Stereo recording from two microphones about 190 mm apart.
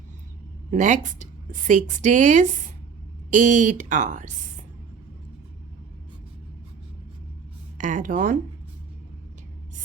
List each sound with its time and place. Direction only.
0.7 s a woman's voice: 40° right (ahead or behind)
7.8 s speech: 40° right (ahead or behind)